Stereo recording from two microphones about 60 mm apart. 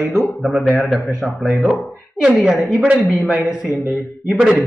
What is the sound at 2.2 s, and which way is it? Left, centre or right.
Speech, centre.